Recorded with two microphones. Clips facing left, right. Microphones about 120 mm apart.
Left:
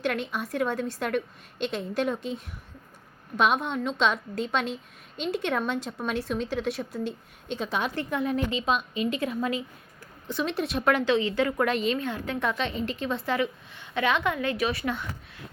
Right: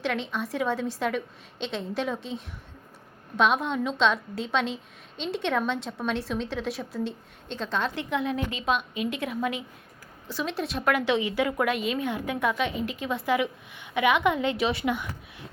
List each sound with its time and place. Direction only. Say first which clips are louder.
0.0 s a woman's voice: even; centre (ahead or behind)
11.0 s a woman's voice: left 1 dB; 15° right (ahead or behind)
11.9 s a woman's voice: right 1 dB; 15° right (ahead or behind)